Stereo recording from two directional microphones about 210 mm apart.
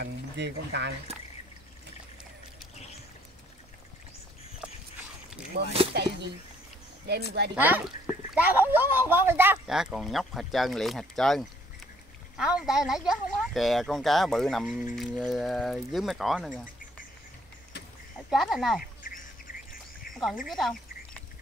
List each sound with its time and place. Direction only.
0.0 s speech: 55° right (ahead or behind)
5.5 s speech: 50° right (ahead or behind)
7.5 s speech: 10° right (ahead or behind)
18.3 s speech: centre (ahead or behind)
19.0 s duck: 40° left (ahead or behind)
20.4 s frog: centre (ahead or behind)